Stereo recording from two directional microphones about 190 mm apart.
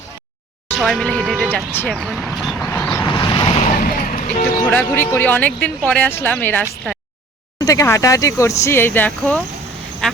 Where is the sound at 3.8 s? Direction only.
45° left (ahead or behind).